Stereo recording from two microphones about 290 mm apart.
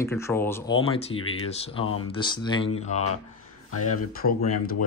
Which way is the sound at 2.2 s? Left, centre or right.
Centre.